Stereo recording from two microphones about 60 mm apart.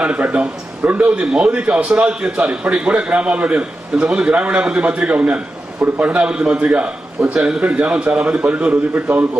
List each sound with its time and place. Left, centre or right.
0.0 s a man's voice: centre
1.2 s a man's voice: centre
1.5 s a man's voice: right